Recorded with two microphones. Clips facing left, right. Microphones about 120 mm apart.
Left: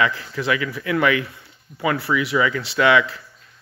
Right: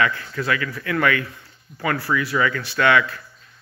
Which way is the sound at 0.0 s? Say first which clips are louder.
Left 1 dB; 20° left (ahead or behind).